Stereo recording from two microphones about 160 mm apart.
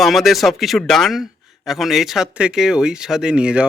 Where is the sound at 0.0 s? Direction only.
Centre (ahead or behind).